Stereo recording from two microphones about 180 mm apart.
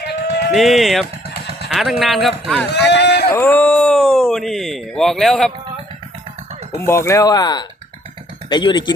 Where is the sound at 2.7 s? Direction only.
70° left (ahead or behind).